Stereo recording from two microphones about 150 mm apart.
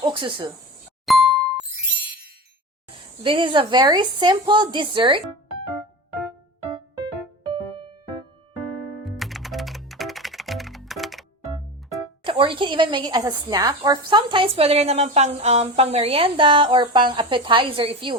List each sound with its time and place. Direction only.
0.0 s a woman's voice: 35° right (ahead or behind)
1.0 s ding: centre (ahead or behind)
3.2 s a woman's voice: 35° right (ahead or behind)
7.5 s music: 35° right (ahead or behind)
9.0 s music: centre (ahead or behind)
12.2 s a woman's voice: 35° right (ahead or behind)